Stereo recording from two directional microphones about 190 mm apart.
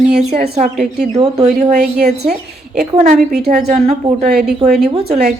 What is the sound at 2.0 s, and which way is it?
Speech, 60° right (ahead or behind).